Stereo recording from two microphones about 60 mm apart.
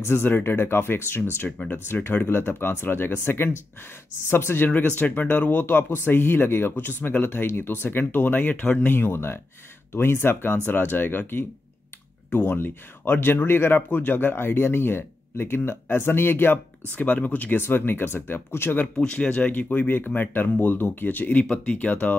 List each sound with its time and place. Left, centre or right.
0.0 s speech: left
4.6 s speech: left
17.6 s speech: left
18.9 s speech: centre